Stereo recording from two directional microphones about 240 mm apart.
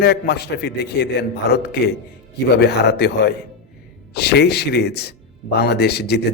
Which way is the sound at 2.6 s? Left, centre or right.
Left.